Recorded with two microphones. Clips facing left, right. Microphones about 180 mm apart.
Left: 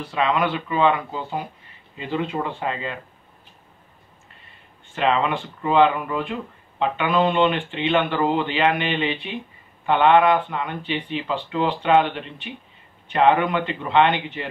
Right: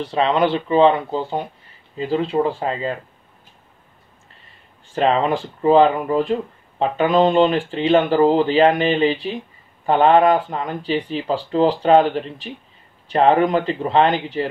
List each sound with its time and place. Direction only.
0.0 s speech: 30° right (ahead or behind)
4.9 s speech: 35° right (ahead or behind)